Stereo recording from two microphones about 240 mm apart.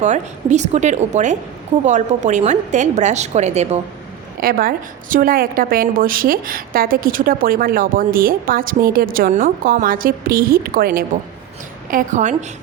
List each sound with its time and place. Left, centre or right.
0.0 s a woman's voice: right